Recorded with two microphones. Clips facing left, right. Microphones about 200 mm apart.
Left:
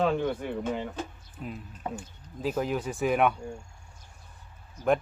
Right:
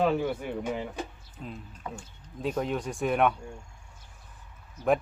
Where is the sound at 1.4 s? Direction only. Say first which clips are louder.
Left 2 dB; 5° left (ahead or behind).